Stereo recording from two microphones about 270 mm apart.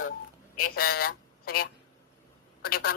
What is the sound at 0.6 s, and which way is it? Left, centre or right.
Speech, left.